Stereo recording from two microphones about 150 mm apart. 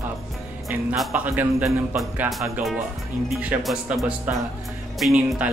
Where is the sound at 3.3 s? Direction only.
10° right (ahead or behind).